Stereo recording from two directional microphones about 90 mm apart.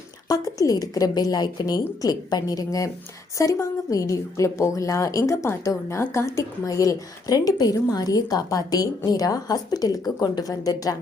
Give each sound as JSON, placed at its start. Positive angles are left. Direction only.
{"t": 0.3, "sound": "a woman's voice", "side_deg": 40}